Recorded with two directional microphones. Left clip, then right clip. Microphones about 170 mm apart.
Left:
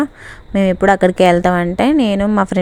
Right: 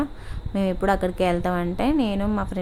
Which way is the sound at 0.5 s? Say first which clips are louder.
Left 10 dB; 35° left (ahead or behind).